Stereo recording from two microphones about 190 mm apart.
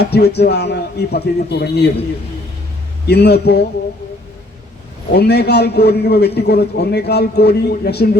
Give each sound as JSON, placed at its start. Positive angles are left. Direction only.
{"t": 0.0, "sound": "a man's voice", "side_deg": 60}
{"t": 3.1, "sound": "a man's voice", "side_deg": 60}
{"t": 5.1, "sound": "a man's voice", "side_deg": 60}